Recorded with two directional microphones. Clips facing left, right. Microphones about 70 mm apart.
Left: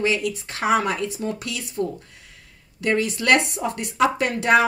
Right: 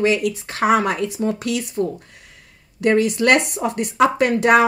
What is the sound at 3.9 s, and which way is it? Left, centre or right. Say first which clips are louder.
Speech: right 4 dB; right.